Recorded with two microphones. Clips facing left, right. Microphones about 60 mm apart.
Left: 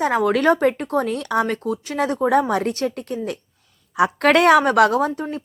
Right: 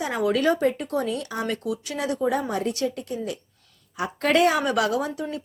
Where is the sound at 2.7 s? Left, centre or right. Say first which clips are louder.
Left 3 dB; left.